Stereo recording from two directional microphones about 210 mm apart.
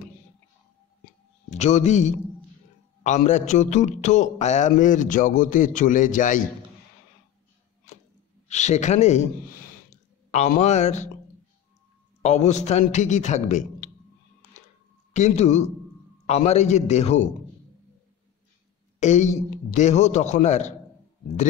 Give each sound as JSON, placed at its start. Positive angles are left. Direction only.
{"t": 1.5, "sound": "a man's voice", "side_deg": 30}
{"t": 8.5, "sound": "a man's voice", "side_deg": 35}
{"t": 9.8, "sound": "clicking", "side_deg": 35}
{"t": 12.2, "sound": "a man's voice", "side_deg": 30}
{"t": 15.1, "sound": "a man's voice", "side_deg": 35}
{"t": 18.9, "sound": "a man's voice", "side_deg": 35}